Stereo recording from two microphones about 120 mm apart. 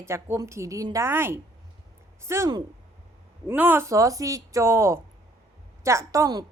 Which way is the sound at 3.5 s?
15° right (ahead or behind).